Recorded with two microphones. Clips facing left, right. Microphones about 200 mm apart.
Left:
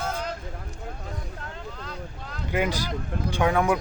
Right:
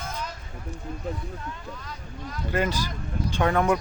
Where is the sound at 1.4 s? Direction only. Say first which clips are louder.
Even; 75° left (ahead or behind).